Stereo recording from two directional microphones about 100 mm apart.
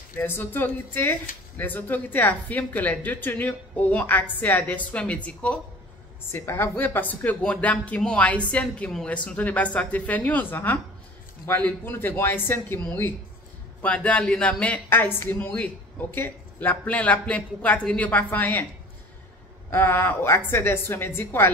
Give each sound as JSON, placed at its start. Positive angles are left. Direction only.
{"t": 0.2, "sound": "a woman's voice", "side_deg": 20}
{"t": 6.3, "sound": "a woman's voice", "side_deg": 25}
{"t": 19.7, "sound": "a woman's voice", "side_deg": 20}